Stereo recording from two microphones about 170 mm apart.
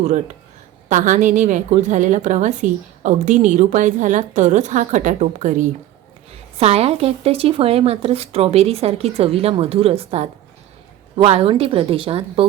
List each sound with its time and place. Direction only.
0.9 s a woman's voice: 50° right (ahead or behind); by 12.5 s 30° right (ahead or behind)